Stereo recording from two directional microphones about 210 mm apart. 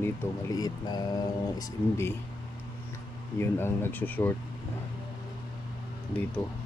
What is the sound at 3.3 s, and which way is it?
Speech, 10° left (ahead or behind).